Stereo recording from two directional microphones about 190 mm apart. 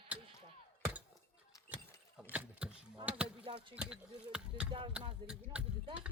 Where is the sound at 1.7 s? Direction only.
5° right (ahead or behind).